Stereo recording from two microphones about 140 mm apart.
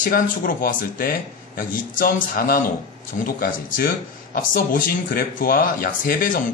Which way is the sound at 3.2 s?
80° left.